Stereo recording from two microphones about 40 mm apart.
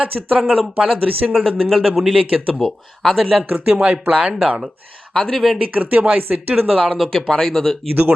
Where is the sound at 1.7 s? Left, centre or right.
Centre.